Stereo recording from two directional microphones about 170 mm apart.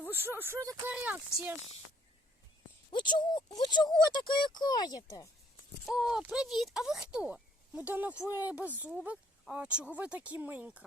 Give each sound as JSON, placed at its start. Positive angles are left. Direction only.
{"t": 0.3, "sound": "speech", "side_deg": -15}
{"t": 2.9, "sound": "speech", "side_deg": 25}
{"t": 5.8, "sound": "speech", "side_deg": -5}
{"t": 8.3, "sound": "speech", "side_deg": 20}
{"t": 8.8, "sound": "speech", "side_deg": -10}